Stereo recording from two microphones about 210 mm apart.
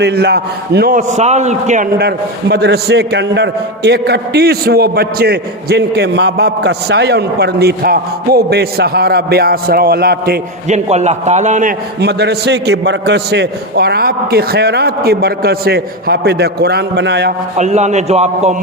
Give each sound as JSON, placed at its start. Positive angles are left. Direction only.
{"t": 0.0, "sound": "a man's voice", "side_deg": -50}
{"t": 2.0, "sound": "a man's voice", "side_deg": -50}
{"t": 10.7, "sound": "a man's voice", "side_deg": -35}
{"t": 11.9, "sound": "a man's voice", "side_deg": -50}
{"t": 17.6, "sound": "a man's voice", "side_deg": -35}